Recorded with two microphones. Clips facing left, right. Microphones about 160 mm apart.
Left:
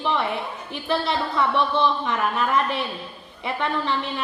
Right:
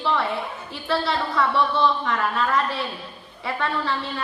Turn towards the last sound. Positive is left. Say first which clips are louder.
# left 1 dB
turn(degrees=20)  # may be behind; listen again after turning